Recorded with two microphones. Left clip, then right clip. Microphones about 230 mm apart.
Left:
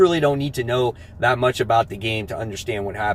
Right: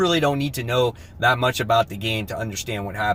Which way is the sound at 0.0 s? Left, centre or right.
Centre.